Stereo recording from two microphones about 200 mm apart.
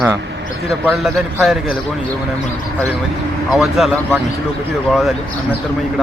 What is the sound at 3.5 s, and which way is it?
Speech, centre (ahead or behind).